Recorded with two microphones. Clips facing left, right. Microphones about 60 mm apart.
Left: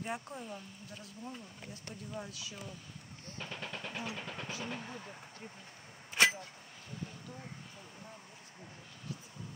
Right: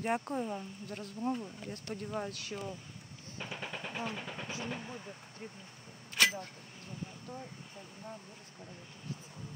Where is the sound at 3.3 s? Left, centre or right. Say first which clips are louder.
Right 2 dB; centre.